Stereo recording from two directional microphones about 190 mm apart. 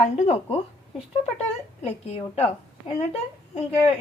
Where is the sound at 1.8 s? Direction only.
35° left (ahead or behind).